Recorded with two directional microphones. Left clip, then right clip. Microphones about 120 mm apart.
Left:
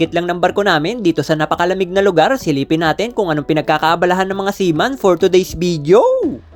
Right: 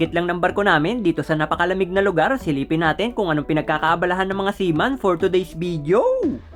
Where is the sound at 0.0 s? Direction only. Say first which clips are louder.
Left 5 dB; 25° left (ahead or behind); by 6.0 s 40° left (ahead or behind).